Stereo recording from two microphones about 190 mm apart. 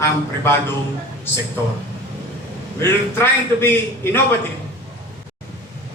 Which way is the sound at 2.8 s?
10° left (ahead or behind).